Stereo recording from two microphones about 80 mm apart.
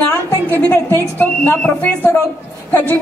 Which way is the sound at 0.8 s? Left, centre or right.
Left.